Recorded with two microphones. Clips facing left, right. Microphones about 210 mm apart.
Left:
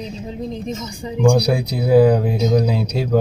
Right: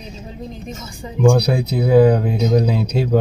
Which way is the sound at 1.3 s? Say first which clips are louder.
Right 1 dB; 5° left (ahead or behind).